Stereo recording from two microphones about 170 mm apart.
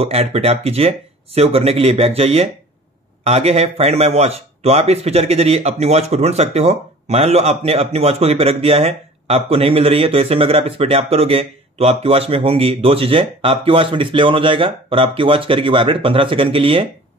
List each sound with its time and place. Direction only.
0.0 s speech: 35° right (ahead or behind)